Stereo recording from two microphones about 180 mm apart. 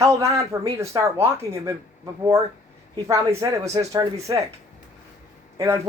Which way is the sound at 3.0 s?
15° right (ahead or behind).